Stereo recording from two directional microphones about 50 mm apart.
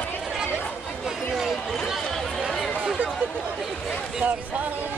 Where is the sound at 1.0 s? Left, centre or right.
Centre.